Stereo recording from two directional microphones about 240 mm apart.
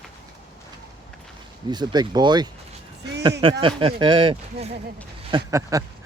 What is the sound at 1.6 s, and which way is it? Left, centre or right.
Speech, centre.